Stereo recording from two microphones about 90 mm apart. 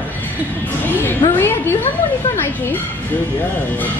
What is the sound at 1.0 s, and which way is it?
Speech, 25° left (ahead or behind).